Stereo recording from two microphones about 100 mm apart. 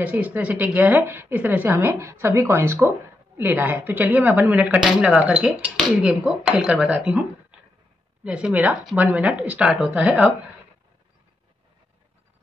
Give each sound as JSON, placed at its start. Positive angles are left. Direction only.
{"t": 0.0, "sound": "speech", "side_deg": -15}